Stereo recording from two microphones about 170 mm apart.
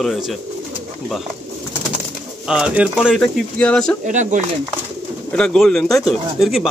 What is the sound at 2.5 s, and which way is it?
Speech, 5° right (ahead or behind).